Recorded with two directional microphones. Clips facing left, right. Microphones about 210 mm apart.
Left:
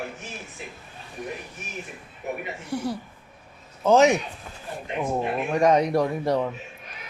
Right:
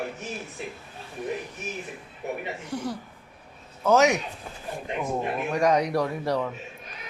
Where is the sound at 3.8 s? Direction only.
30° left (ahead or behind).